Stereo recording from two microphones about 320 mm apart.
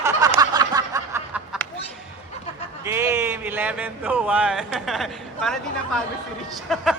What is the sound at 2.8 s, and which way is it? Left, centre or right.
A man's voice, centre.